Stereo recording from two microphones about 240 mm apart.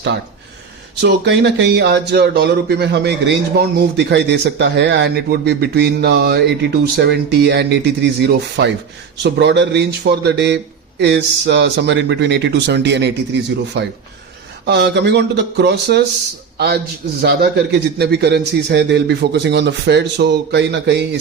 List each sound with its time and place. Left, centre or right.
1.0 s speech: right